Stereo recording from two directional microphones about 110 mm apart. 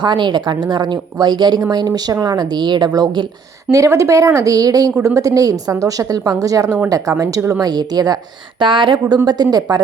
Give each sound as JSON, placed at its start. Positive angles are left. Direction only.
{"t": 0.0, "sound": "a woman's voice", "side_deg": -45}
{"t": 7.6, "sound": "a woman's voice", "side_deg": -40}